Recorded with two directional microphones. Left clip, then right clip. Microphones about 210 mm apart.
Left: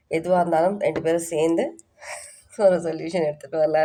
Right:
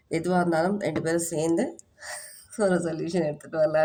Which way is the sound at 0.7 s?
40° left (ahead or behind).